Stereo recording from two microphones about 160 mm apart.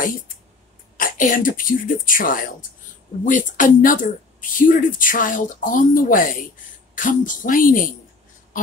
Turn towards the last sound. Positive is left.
turn(degrees=60)  # may be behind; listen again after turning